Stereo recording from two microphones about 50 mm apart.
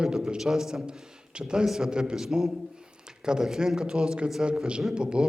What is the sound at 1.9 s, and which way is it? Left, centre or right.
A man's voice, centre.